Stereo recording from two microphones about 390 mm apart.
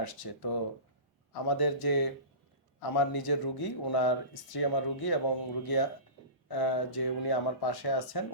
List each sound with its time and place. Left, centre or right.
0.0 s speech: left